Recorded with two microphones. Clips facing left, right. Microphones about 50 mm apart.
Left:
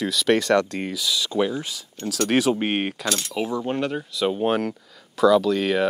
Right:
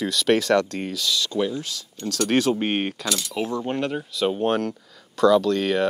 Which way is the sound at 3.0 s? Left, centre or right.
Left.